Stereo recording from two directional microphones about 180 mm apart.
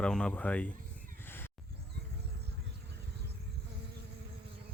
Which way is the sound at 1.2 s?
10° left (ahead or behind).